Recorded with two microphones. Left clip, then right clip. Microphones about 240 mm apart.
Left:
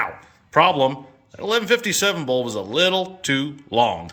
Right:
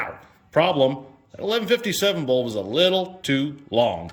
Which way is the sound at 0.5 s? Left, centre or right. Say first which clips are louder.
Left 3 dB; centre.